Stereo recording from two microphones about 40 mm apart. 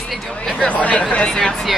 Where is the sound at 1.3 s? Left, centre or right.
Centre.